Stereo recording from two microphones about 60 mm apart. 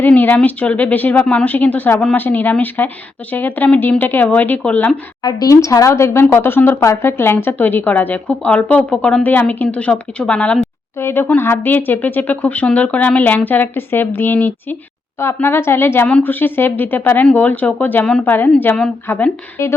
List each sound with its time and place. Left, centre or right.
0.1 s a woman's voice: left
5.4 s a woman's voice: left
5.9 s a woman's voice: left; by 9.2 s centre
9.2 s a woman's voice: left
10.9 s a woman's voice: left